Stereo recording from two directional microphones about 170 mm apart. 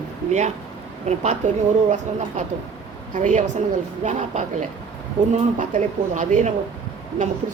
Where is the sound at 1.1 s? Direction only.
40° right (ahead or behind).